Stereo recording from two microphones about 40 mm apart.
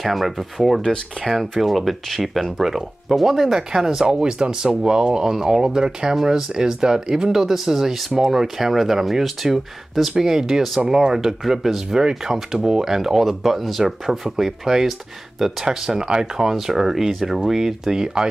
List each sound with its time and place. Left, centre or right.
0.0 s speech: centre
3.5 s speech: centre